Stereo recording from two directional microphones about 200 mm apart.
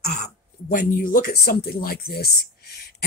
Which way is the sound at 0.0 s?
45° left (ahead or behind).